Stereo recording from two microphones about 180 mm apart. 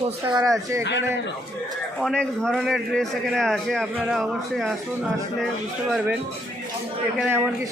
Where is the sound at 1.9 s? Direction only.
5° left (ahead or behind).